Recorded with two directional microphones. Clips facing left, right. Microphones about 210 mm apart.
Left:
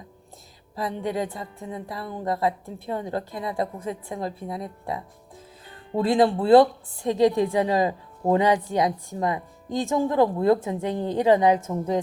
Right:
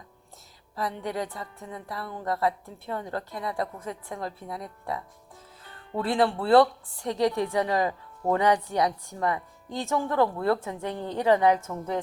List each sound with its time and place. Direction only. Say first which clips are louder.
0.8 s speech: left 4 dB; 15° left (ahead or behind)